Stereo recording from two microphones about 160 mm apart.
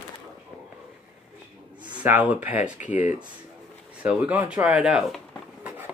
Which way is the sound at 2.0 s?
15° right (ahead or behind).